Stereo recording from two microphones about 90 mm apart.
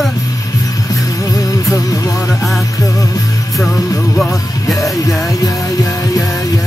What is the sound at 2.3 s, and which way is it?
Music, centre (ahead or behind).